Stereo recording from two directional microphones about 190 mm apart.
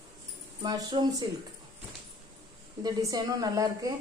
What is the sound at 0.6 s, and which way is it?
Speech, 20° right (ahead or behind).